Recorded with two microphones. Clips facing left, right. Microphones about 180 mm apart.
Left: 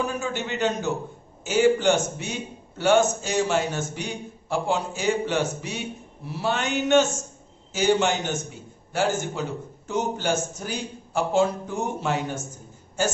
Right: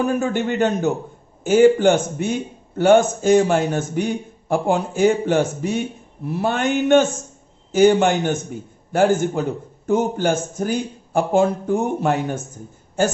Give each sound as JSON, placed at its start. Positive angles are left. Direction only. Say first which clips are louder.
{"t": 0.0, "sound": "a man's voice", "louder": "right 8 dB", "side_deg": -55}